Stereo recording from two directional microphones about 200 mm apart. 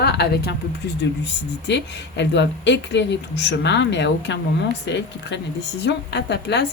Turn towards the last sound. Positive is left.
turn(degrees=55)  # may be behind; listen again after turning